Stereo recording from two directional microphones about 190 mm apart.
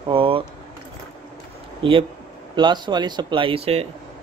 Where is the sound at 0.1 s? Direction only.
30° right (ahead or behind).